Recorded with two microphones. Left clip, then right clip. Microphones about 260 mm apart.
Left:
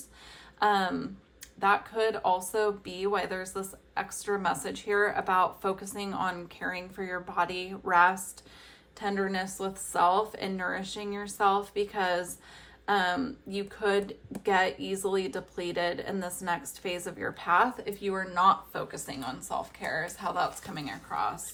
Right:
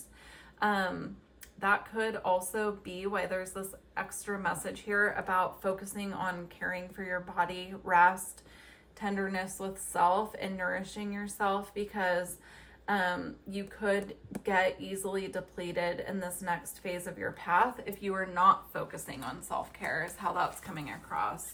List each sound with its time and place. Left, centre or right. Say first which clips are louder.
0.6 s speech: left 4 dB; centre
9.4 s speech: left 4 dB; centre